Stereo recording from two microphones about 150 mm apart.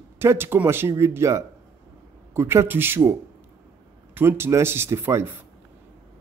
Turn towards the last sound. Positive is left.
turn(degrees=-15)  # may be behind; listen again after turning